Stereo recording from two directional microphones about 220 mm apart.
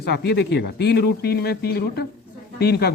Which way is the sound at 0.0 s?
50° left (ahead or behind).